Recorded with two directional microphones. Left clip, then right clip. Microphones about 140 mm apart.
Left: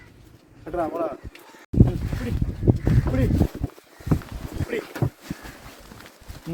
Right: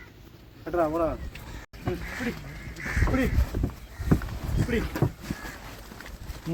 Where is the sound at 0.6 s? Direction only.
45° right (ahead or behind).